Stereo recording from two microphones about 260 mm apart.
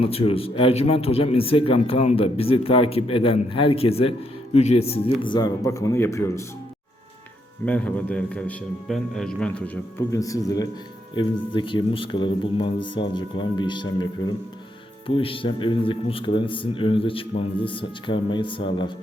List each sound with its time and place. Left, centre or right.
0.0 s a man's voice: left
7.6 s a man's voice: centre